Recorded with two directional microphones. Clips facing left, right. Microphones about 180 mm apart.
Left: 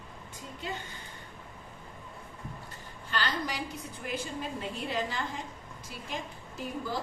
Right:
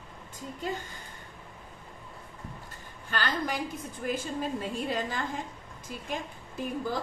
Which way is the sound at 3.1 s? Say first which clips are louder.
Right 2 dB; 50° right (ahead or behind).